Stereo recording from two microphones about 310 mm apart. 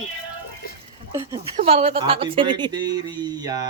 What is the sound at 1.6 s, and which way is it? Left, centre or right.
A woman's voice, centre.